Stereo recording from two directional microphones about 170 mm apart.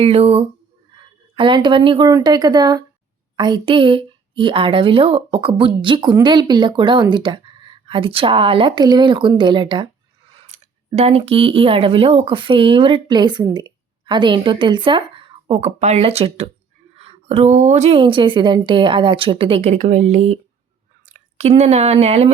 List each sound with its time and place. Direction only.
0.0 s a woman's voice: 35° right (ahead or behind)